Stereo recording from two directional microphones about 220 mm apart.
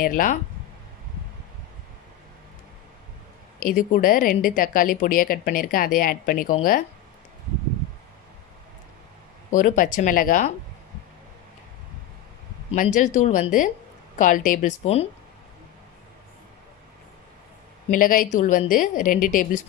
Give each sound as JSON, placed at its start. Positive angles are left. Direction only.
{"t": 0.0, "sound": "a woman's voice", "side_deg": 40}
{"t": 3.5, "sound": "a woman's voice", "side_deg": 40}
{"t": 9.5, "sound": "a woman's voice", "side_deg": 40}
{"t": 12.7, "sound": "a woman's voice", "side_deg": 35}
{"t": 17.8, "sound": "a woman's voice", "side_deg": 40}